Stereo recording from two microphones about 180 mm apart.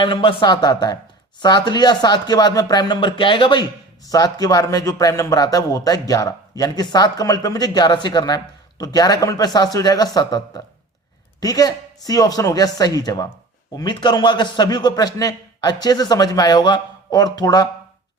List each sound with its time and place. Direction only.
0.0 s speech: 25° left (ahead or behind)